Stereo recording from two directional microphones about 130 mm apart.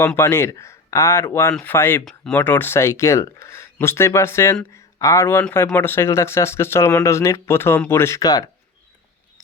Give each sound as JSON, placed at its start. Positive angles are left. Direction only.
{"t": 0.2, "sound": "speech", "side_deg": 20}